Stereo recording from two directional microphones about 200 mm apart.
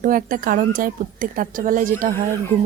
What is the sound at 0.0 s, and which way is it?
Speech, 45° right (ahead or behind).